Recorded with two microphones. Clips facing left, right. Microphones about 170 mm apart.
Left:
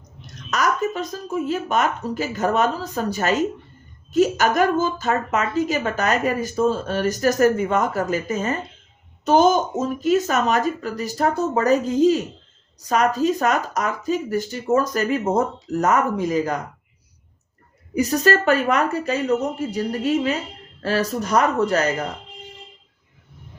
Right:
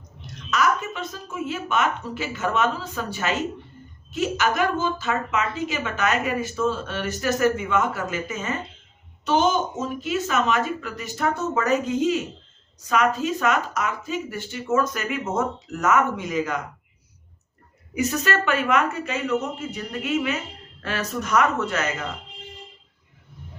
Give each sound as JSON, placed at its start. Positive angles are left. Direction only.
{"t": 0.5, "sound": "a woman's voice", "side_deg": 40}
{"t": 17.9, "sound": "a woman's voice", "side_deg": 35}